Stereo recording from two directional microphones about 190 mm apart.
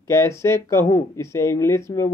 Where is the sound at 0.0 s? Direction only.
15° left (ahead or behind).